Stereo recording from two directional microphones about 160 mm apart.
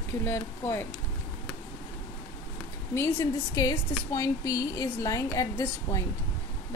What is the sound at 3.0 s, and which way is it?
A woman's voice, 20° left (ahead or behind).